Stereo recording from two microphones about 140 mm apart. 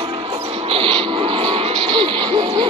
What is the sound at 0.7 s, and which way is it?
Music, 40° right (ahead or behind).